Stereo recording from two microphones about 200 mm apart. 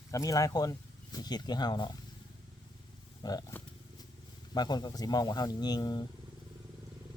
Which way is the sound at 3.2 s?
20° left (ahead or behind).